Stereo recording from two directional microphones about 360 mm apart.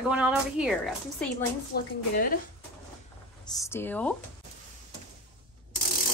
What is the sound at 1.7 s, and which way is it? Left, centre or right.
Speech, left.